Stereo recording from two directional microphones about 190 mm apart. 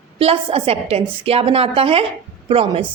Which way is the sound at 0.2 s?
30° right (ahead or behind).